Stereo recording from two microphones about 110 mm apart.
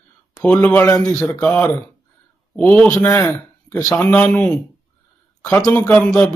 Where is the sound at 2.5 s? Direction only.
10° left (ahead or behind).